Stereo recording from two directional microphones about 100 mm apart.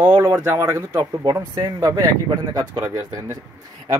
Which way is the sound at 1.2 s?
40° right (ahead or behind).